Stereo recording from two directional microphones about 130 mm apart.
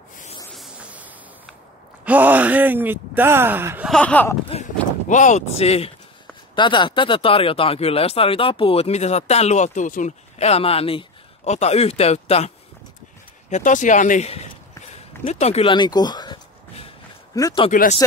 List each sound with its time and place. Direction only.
0.7 s a sound: 10° right (ahead or behind)
2.0 s speech: 15° right (ahead or behind)
4.0 s speech: 10° left (ahead or behind)
5.0 s speech: 75° left (ahead or behind); by 5.9 s 50° left (ahead or behind)
6.5 s speech: 40° left (ahead or behind); by 10.1 s 80° left
10.4 s speech: 50° left (ahead or behind)
13.5 s speech: 75° left (ahead or behind)
15.2 s speech: 55° left (ahead or behind)
15.6 s speech: 35° left (ahead or behind)
17.6 s speech: 65° left (ahead or behind)